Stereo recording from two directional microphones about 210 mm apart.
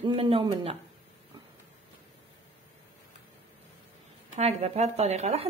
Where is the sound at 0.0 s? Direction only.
25° right (ahead or behind).